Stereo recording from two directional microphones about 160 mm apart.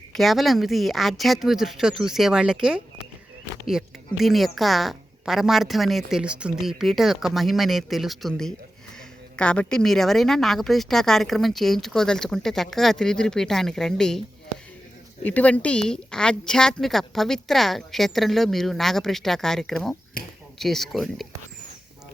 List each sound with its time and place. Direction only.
0.1 s a woman's voice: centre (ahead or behind)
15.2 s a woman's voice: 10° left (ahead or behind)
20.2 s speech: 65° left (ahead or behind)
20.6 s a woman's voice: centre (ahead or behind)